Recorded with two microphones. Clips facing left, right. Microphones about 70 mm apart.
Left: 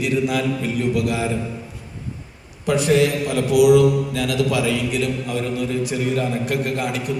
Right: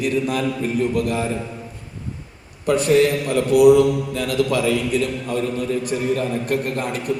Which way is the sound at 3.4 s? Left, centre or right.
Right.